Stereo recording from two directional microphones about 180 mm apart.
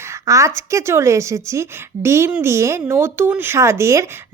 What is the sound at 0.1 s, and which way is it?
A woman's voice, 15° right (ahead or behind).